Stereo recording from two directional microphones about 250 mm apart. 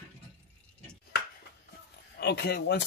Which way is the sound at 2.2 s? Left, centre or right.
Left.